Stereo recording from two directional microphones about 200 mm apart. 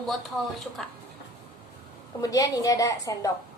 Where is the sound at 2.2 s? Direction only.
15° left (ahead or behind).